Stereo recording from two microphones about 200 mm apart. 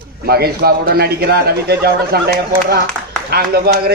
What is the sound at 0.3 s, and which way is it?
A man's voice, 50° right (ahead or behind).